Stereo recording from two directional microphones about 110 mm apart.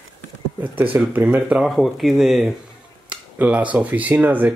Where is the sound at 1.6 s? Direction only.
Centre (ahead or behind).